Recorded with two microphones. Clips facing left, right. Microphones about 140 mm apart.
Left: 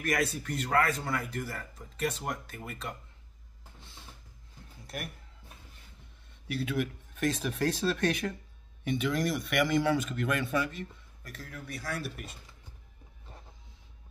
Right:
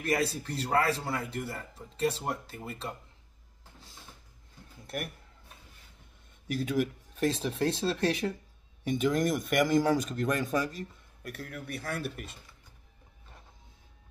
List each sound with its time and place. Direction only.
0.0 s speech: 30° right (ahead or behind)
4.8 s a sound: 50° right (ahead or behind)
6.4 s speech: 40° right (ahead or behind)
8.8 s speech: 40° right (ahead or behind)
11.2 s speech: 60° right (ahead or behind)